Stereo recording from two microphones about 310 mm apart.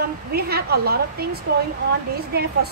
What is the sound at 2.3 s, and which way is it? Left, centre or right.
Speech, right.